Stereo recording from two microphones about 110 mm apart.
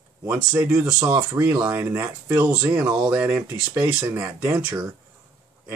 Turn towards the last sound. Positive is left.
turn(degrees=-15)  # may be behind; listen again after turning